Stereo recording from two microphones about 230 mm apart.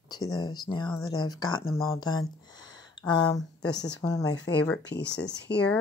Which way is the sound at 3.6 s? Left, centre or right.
Left.